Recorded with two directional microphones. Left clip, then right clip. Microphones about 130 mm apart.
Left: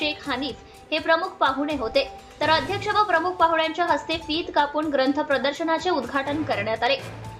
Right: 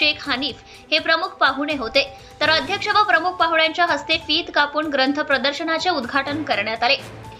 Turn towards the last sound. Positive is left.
turn(degrees=-20)  # may be behind; listen again after turning